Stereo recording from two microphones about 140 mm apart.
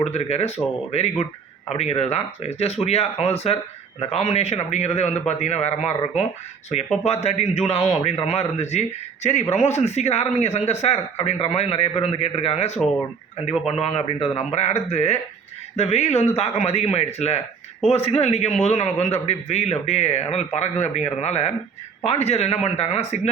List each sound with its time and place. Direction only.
0.0 s a man's voice: 50° left (ahead or behind)